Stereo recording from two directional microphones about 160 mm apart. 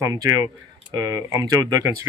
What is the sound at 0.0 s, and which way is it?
Speech, 20° right (ahead or behind).